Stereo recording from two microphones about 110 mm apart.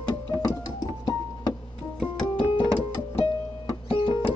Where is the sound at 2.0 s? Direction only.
10° left (ahead or behind).